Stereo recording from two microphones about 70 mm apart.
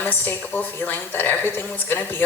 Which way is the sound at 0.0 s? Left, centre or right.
Left.